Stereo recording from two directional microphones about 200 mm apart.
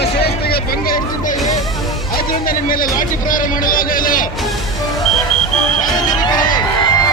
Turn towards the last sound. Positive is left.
turn(degrees=20)  # may be behind; listen again after turning